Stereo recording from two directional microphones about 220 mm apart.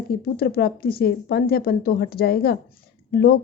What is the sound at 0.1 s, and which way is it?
A woman's voice, 40° left (ahead or behind).